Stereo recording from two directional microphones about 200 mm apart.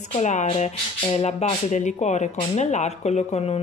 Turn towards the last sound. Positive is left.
turn(degrees=35)  # may be behind; listen again after turning